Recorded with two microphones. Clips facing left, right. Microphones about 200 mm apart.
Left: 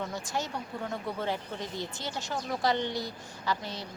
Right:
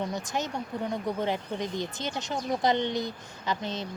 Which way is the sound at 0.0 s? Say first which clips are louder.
Right 3 dB; 20° right (ahead or behind).